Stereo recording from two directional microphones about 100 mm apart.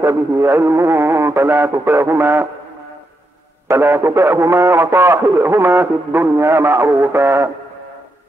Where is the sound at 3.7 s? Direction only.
25° right (ahead or behind).